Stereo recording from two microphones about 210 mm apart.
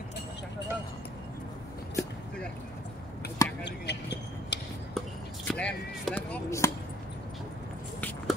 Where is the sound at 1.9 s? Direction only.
10° left (ahead or behind).